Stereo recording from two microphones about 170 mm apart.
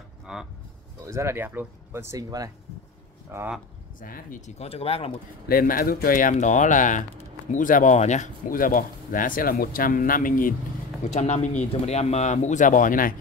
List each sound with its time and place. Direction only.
0.3 s speech: 5° right (ahead or behind)
1.0 s speech: 15° right (ahead or behind)
4.0 s speech: 50° left (ahead or behind); by 5.1 s 35° left (ahead or behind)
5.5 s speech: 60° left (ahead or behind)
11.1 s speech: 45° left (ahead or behind)